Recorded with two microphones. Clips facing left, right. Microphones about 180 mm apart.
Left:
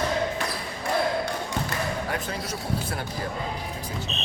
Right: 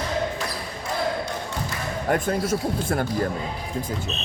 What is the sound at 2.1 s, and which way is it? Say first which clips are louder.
Speech: right 8 dB; 50° right (ahead or behind).